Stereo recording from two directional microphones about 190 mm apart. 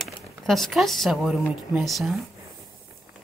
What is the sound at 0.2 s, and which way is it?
Speech, centre (ahead or behind).